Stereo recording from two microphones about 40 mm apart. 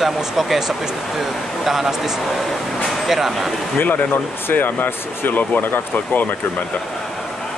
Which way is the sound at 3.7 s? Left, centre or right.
Left.